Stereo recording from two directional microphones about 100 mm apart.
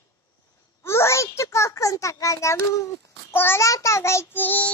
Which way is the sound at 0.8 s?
30° left (ahead or behind).